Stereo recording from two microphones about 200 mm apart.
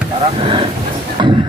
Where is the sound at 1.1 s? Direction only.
25° right (ahead or behind).